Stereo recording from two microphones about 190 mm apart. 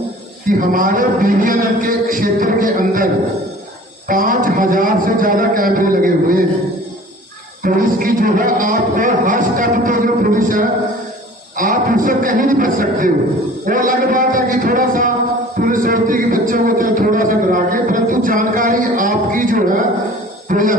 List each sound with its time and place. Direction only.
0.4 s speech: 45° right (ahead or behind)
4.1 s speech: 45° right (ahead or behind)
7.6 s a man's voice: 50° right (ahead or behind)